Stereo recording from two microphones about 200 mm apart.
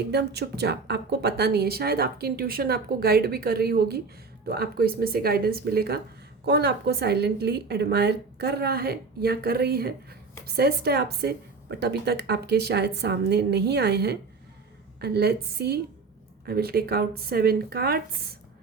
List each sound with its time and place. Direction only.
0.1 s a woman's voice: 55° right (ahead or behind)